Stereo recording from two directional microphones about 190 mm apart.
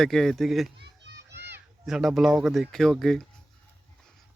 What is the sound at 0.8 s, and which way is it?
Children playing, 60° right (ahead or behind).